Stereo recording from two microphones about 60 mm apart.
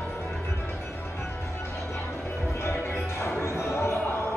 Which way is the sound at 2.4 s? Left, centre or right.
Left.